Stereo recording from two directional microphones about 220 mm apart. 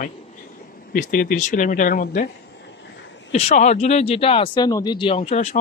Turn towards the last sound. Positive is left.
turn(degrees=30)  # may be behind; listen again after turning